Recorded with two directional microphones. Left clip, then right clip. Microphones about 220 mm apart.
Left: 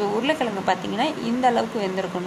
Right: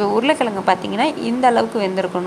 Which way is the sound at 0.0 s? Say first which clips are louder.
Right 6 dB; 20° right (ahead or behind).